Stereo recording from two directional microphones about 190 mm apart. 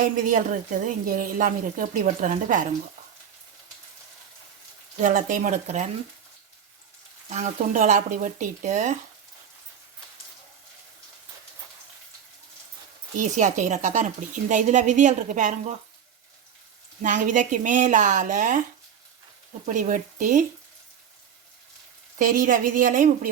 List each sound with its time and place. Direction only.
0.0 s a woman's voice: 45° right (ahead or behind)
4.9 s a woman's voice: 40° right (ahead or behind)
7.3 s a woman's voice: 40° right (ahead or behind)
13.1 s a woman's voice: 40° right (ahead or behind)
17.0 s a woman's voice: 40° right (ahead or behind)
19.6 s a woman's voice: 40° right (ahead or behind)
22.2 s a woman's voice: 45° right (ahead or behind)